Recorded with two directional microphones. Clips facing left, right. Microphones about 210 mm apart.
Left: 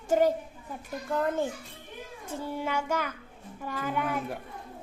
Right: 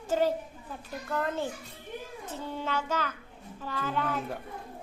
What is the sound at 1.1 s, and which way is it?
Child singing, 10° left (ahead or behind).